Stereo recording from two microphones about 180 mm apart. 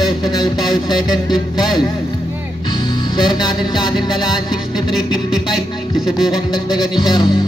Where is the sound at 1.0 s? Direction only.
25° left (ahead or behind).